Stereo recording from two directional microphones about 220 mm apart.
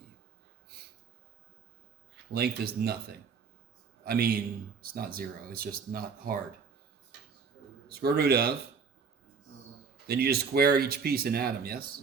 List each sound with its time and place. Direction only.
0.7 s a sound: 45° right (ahead or behind)
2.3 s speech: 45° right (ahead or behind)
7.9 s speech: 45° right (ahead or behind)
10.1 s speech: 45° right (ahead or behind)